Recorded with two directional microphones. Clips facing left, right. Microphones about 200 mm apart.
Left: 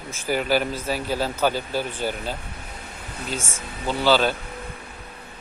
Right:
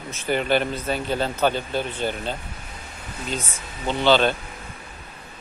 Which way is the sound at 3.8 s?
5° left (ahead or behind).